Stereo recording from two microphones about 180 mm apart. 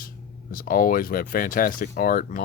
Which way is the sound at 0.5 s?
50° left (ahead or behind).